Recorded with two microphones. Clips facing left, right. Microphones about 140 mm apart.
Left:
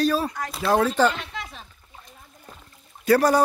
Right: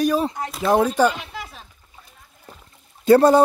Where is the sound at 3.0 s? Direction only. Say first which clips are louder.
Right 5 dB; 25° right (ahead or behind).